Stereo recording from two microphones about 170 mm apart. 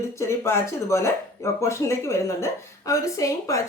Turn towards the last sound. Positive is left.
turn(degrees=20)  # may be behind; listen again after turning